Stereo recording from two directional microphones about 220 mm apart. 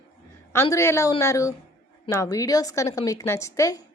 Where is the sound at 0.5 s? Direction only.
10° left (ahead or behind).